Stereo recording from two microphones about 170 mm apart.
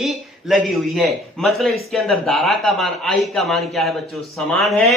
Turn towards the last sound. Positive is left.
turn(degrees=0)  # may be behind; listen again after turning